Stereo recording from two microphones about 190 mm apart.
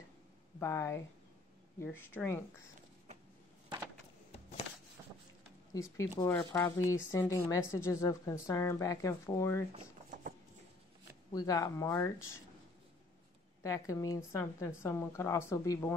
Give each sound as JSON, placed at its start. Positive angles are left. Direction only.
{"t": 0.6, "sound": "a woman's voice", "side_deg": 15}
{"t": 2.1, "sound": "a woman's voice", "side_deg": 10}
{"t": 5.7, "sound": "a woman's voice", "side_deg": 15}
{"t": 9.7, "sound": "a sound", "side_deg": -30}
{"t": 11.3, "sound": "a woman's voice", "side_deg": 20}
{"t": 13.6, "sound": "a woman's voice", "side_deg": 15}